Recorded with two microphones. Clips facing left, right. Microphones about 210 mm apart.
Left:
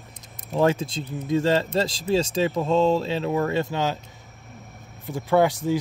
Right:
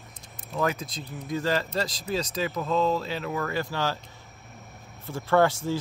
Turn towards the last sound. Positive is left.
turn(degrees=15)  # may be behind; listen again after turning